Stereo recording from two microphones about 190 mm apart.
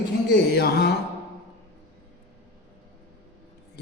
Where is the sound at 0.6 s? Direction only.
60° left (ahead or behind).